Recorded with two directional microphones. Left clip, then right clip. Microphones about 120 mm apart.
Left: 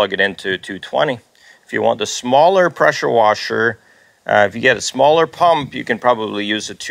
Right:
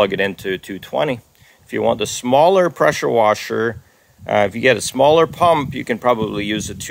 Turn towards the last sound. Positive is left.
turn(degrees=-40)  # may be behind; listen again after turning